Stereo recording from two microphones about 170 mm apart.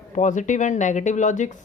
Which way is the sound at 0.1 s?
45° left (ahead or behind).